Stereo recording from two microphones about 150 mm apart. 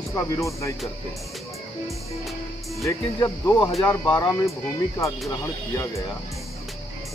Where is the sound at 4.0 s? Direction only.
30° left (ahead or behind).